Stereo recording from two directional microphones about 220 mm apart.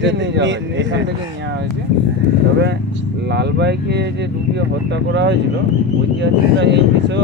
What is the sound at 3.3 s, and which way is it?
Speech, 50° right (ahead or behind).